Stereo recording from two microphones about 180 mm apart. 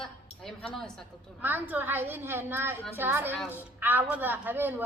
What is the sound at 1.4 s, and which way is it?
A woman's voice, 10° right (ahead or behind).